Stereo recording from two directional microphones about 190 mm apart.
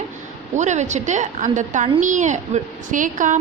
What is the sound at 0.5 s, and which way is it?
A woman's voice, 40° right (ahead or behind).